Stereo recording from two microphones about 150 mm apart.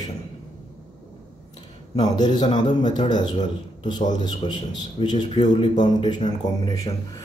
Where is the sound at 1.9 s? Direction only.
30° left (ahead or behind).